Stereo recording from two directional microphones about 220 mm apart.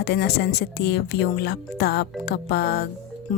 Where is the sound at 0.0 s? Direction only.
50° left (ahead or behind).